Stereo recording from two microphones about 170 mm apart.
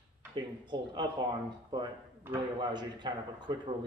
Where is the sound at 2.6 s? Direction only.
25° right (ahead or behind).